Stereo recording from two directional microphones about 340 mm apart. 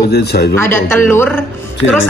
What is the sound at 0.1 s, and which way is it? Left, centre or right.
Speech, left.